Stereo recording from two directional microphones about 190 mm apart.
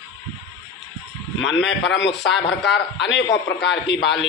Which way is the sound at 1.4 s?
75° left (ahead or behind).